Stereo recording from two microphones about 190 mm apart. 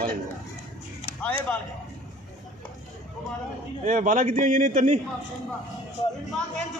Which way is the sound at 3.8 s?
45° right (ahead or behind).